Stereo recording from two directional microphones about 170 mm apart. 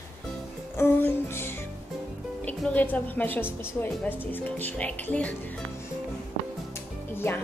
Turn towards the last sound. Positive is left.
turn(degrees=15)  # may be behind; listen again after turning